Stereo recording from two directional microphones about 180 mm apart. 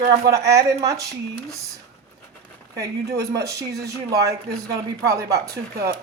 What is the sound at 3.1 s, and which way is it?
Speech, 20° right (ahead or behind).